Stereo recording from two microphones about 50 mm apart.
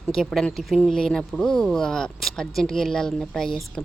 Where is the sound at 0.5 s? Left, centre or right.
Centre.